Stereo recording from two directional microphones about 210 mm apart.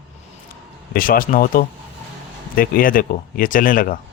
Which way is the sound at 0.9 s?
40° left (ahead or behind).